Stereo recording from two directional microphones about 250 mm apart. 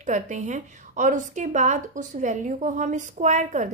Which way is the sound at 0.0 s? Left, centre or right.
Right.